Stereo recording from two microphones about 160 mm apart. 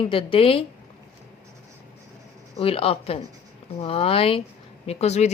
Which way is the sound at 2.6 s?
35° left (ahead or behind).